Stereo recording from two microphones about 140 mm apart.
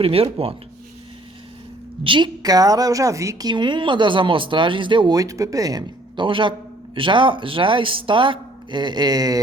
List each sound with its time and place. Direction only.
0.0 s speech: 40° right (ahead or behind)
2.0 s a woman's voice: 35° right (ahead or behind)